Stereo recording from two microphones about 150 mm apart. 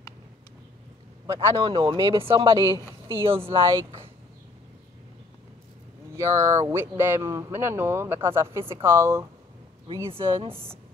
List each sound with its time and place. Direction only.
1.2 s a man's voice: 20° right (ahead or behind)
1.9 s speech: 35° right (ahead or behind)
6.1 s speech: 20° right (ahead or behind)
10.0 s speech: 35° right (ahead or behind)